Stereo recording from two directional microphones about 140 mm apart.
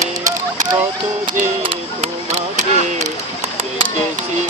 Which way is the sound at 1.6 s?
55° right (ahead or behind).